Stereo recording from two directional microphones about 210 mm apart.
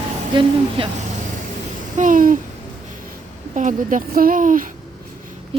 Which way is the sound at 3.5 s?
40° right (ahead or behind).